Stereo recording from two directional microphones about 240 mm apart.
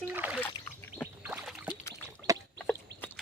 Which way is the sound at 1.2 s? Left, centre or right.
Centre.